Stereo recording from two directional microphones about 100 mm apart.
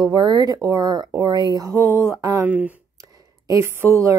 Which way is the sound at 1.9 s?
20° right (ahead or behind).